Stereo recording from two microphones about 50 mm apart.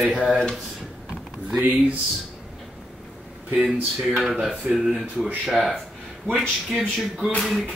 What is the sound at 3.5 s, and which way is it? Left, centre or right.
Speech, right.